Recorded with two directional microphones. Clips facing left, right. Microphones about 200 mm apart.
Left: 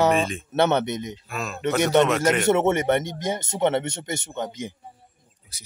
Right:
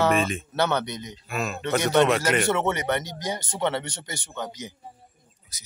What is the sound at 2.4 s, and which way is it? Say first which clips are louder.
Speech: left 5 dB; 20° left (ahead or behind).